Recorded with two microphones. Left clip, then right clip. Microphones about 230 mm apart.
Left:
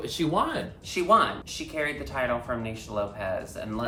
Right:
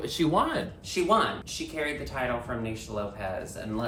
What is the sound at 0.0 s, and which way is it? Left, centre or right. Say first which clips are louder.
Speech: right 1 dB; centre.